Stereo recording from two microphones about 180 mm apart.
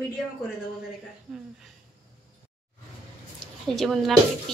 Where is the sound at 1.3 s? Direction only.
5° right (ahead or behind).